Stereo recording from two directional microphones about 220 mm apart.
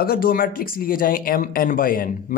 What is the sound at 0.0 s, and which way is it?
Speech, 40° left (ahead or behind).